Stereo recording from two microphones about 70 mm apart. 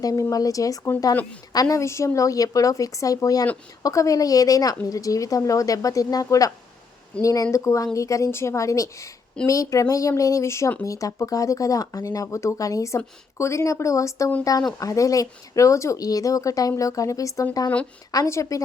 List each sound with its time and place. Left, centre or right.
0.0 s a woman's voice: left
1.1 s a woman's voice: centre
1.5 s a woman's voice: left
1.8 s a woman's voice: left